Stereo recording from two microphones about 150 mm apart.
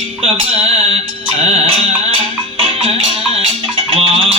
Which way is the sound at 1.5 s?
40° right (ahead or behind).